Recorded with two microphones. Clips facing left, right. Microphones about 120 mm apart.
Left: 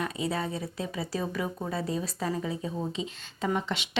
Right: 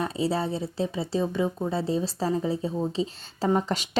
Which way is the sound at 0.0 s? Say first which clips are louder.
Right 4 dB; 30° right (ahead or behind).